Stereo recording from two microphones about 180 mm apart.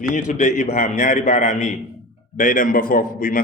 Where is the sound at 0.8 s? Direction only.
45° left (ahead or behind).